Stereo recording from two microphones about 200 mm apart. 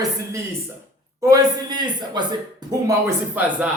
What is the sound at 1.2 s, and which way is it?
Speech, 15° right (ahead or behind).